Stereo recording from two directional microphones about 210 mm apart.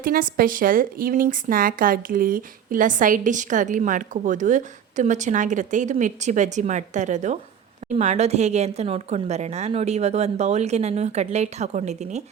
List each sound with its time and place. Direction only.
0.0 s a woman's voice: 45° right (ahead or behind)